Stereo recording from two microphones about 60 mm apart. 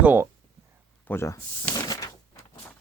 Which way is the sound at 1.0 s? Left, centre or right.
Left.